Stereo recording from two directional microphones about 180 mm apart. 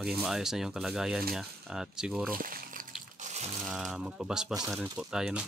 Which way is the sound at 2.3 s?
50° right (ahead or behind).